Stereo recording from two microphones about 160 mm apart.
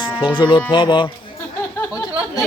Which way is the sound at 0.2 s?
30° left (ahead or behind).